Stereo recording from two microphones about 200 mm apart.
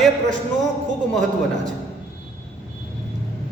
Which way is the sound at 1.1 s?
Centre (ahead or behind).